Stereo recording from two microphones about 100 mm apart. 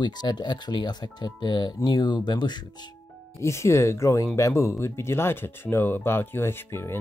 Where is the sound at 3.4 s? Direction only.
30° left (ahead or behind).